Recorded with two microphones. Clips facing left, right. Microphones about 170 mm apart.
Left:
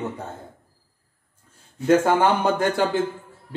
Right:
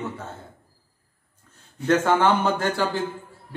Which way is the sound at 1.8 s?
10° left (ahead or behind).